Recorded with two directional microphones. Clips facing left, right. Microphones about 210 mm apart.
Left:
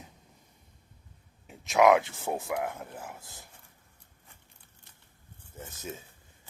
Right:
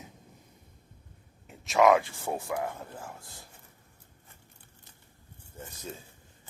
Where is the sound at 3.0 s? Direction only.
20° left (ahead or behind).